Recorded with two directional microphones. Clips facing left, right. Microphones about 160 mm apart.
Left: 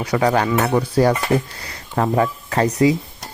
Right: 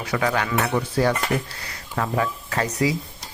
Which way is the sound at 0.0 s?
35° left (ahead or behind).